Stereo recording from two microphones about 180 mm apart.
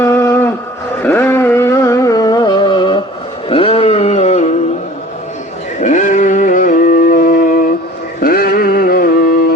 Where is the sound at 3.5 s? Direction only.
30° left (ahead or behind).